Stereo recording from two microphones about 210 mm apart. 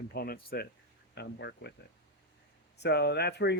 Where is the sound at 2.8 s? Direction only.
50° left (ahead or behind).